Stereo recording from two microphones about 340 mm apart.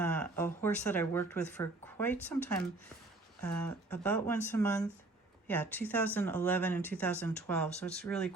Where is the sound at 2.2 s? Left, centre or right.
Centre.